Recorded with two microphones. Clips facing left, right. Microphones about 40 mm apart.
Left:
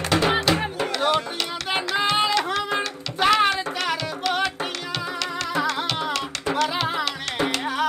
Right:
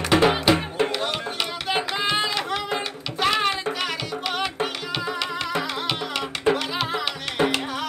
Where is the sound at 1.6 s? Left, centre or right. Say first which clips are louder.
Left 2 dB; centre.